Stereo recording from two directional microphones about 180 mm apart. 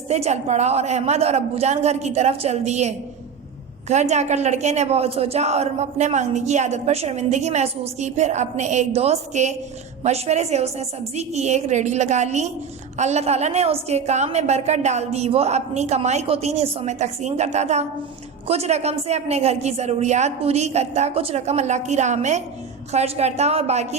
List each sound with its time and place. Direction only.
0.1 s a woman's voice: 35° right (ahead or behind)